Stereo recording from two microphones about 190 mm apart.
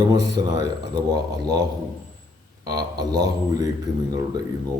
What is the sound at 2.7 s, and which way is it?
Speech, 20° right (ahead or behind).